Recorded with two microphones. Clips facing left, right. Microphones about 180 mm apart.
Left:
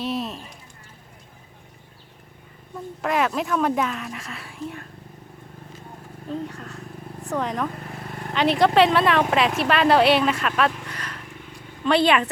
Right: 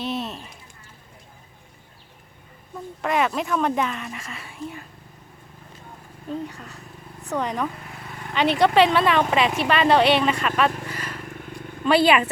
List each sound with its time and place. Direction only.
0.0 s a sound: centre (ahead or behind)
3.0 s speech: centre (ahead or behind)
6.5 s speech: centre (ahead or behind)
10.8 s vehicle: 5° right (ahead or behind)
11.3 s wild animals: 55° right (ahead or behind)
11.9 s speech: 5° right (ahead or behind)